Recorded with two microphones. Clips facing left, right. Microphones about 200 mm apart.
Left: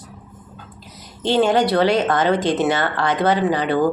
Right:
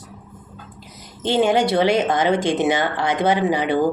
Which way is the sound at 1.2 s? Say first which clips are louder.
Left 1 dB; 15° right (ahead or behind).